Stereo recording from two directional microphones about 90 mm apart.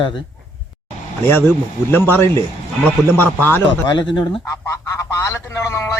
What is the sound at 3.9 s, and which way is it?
Speech, 55° left (ahead or behind).